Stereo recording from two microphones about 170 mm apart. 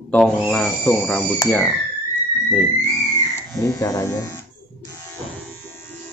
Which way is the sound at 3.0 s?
20° left (ahead or behind).